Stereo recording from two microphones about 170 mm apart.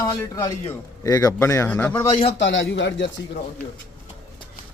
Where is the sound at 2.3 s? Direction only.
90° left.